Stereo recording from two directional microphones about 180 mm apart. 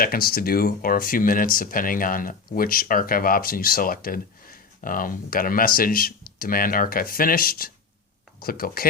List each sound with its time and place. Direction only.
0.0 s speech: 55° left (ahead or behind)